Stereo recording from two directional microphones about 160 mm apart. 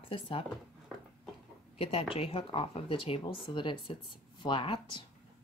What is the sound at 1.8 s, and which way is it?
Speech, 35° left (ahead or behind).